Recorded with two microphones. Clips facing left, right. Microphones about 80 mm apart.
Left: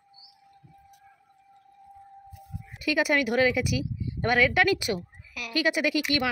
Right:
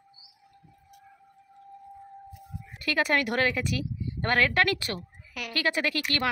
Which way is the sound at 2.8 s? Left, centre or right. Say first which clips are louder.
Left 2 dB; centre.